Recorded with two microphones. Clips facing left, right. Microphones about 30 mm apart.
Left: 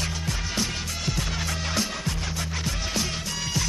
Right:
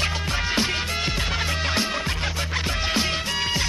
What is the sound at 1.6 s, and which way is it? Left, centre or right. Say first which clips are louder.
Music: right 4 dB; right.